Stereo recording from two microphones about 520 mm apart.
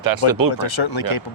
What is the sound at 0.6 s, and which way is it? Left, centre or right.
Speech, left.